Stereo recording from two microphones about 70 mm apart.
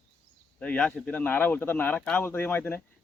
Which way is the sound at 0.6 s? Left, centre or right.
Centre.